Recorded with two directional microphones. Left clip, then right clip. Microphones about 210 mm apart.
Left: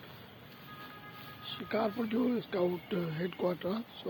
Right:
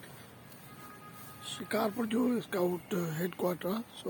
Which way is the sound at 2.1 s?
15° right (ahead or behind).